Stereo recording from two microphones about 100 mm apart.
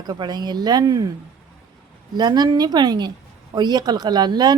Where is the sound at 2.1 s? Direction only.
45° right (ahead or behind).